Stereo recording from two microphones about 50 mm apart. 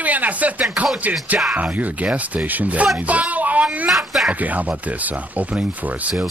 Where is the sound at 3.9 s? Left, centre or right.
Centre.